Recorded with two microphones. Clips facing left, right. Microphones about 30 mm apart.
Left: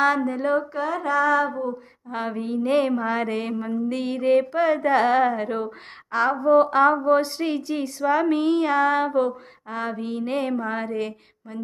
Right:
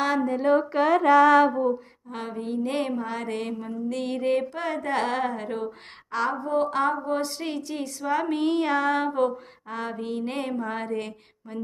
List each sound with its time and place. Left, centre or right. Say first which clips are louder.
0.0 s speech: left 2 dB; centre
0.7 s a sound: right 5 dB; right
2.0 s speech: left 4 dB; centre
2.9 s speech: left 6 dB; left
7.3 s speech: left 5 dB; centre